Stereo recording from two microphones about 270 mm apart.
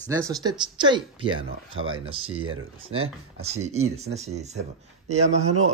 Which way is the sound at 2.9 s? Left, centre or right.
Right.